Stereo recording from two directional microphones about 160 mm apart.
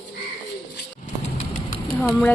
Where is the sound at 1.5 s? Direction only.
60° left (ahead or behind).